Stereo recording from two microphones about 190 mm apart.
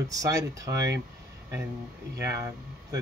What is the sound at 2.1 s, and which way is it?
Speech, 15° right (ahead or behind).